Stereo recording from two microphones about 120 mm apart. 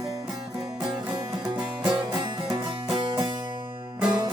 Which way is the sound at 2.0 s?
40° right (ahead or behind).